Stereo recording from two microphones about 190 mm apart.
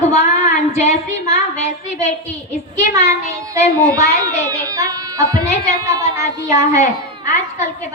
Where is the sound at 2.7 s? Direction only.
15° right (ahead or behind).